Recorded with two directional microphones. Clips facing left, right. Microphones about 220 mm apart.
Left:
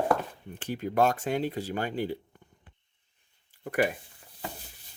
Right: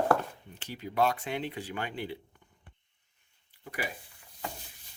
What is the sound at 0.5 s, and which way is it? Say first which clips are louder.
Speech: left 4 dB; 50° left (ahead or behind).